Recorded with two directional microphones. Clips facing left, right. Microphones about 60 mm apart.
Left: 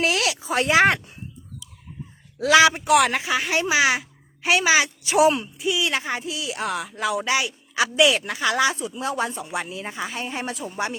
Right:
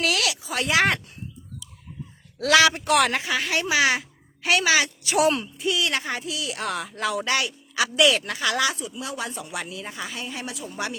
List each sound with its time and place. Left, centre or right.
0.0 s a sound: left
2.5 s a woman's voice: centre
2.8 s speech: centre
3.4 s a woman's voice: centre
5.3 s speech: centre
5.8 s speech: centre
6.7 s speech: centre; by 10.9 s left